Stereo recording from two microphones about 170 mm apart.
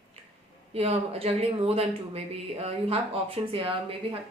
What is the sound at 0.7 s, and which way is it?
Speech, 35° right (ahead or behind).